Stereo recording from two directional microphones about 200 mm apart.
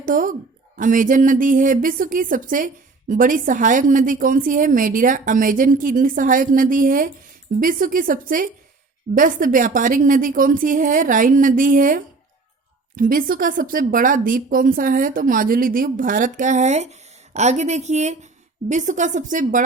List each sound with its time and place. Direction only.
0.0 s a woman's voice: 40° right (ahead or behind)